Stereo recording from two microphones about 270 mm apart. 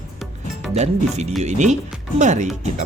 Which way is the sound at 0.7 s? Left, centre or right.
Right.